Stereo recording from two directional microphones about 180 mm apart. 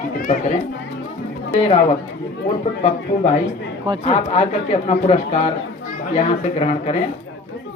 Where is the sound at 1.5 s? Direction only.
35° left (ahead or behind).